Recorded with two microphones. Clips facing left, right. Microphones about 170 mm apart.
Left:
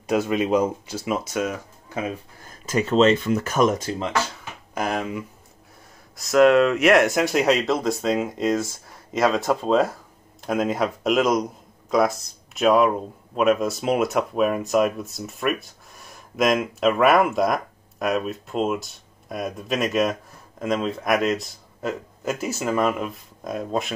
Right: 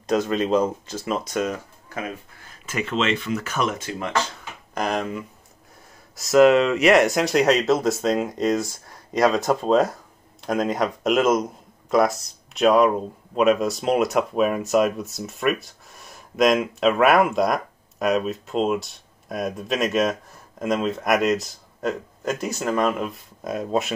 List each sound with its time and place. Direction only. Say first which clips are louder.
0.0 s speech: even; 10° left (ahead or behind)
2.4 s speech: left 5 dB; 35° left (ahead or behind)
4.7 s a man's voice: right 1 dB; 5° left (ahead or behind)